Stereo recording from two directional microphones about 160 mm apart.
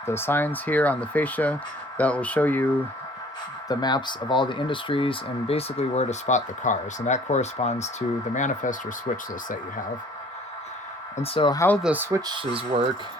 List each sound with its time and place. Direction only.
0.0 s speech: 15° left (ahead or behind)
3.7 s speech: 25° left (ahead or behind); by 9.6 s 55° left (ahead or behind)
11.2 s speech: 30° left (ahead or behind)
11.8 s speech: 10° right (ahead or behind)
12.2 s speech: 30° right (ahead or behind)